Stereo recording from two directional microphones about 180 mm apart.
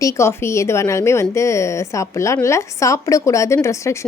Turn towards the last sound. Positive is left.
turn(degrees=15)  # may be behind; listen again after turning